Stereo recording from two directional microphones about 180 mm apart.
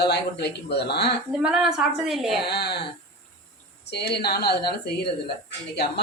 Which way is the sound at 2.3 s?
65° left (ahead or behind).